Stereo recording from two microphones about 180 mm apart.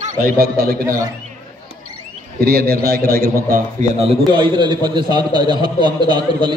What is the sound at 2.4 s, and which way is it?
A man's voice, 60° right (ahead or behind).